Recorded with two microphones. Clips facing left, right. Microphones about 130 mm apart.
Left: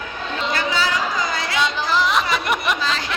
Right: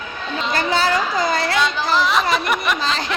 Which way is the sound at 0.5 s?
50° right (ahead or behind).